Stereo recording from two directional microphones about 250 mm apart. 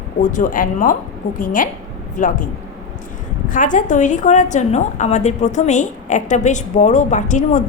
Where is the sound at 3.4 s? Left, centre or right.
Left.